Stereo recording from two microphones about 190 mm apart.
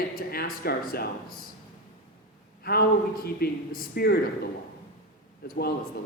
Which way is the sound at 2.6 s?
55° left (ahead or behind).